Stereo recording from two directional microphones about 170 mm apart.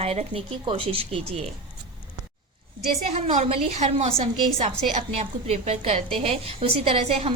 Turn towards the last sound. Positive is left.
turn(degrees=-35)  # may be behind; listen again after turning